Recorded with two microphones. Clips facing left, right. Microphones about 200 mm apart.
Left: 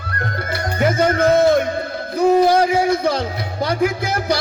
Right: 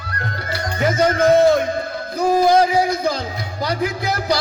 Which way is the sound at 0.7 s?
55° left (ahead or behind).